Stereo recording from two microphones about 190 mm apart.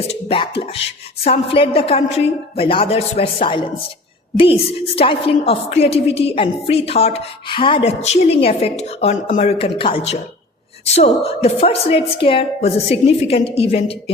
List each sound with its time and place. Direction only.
0.1 s beatboxing: 30° left (ahead or behind)
1.2 s a woman's voice: 30° left (ahead or behind)